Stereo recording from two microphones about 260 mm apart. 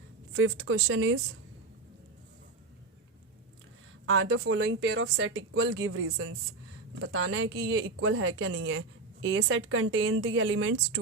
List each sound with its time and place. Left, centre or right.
0.3 s speech: right
4.0 s speech: right